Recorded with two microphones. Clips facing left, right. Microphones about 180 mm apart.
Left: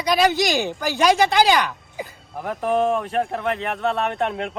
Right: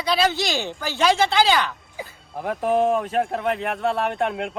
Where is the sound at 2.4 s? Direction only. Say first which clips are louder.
Right 1 dB; 10° right (ahead or behind).